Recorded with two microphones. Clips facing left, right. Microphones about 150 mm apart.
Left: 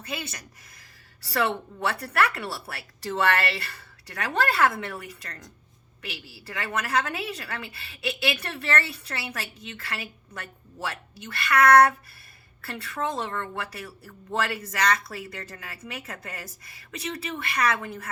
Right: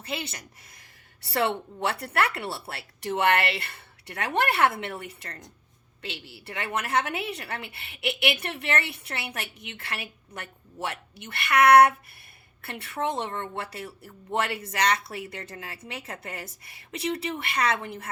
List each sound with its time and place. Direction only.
0.0 s a woman's voice: 25° right (ahead or behind)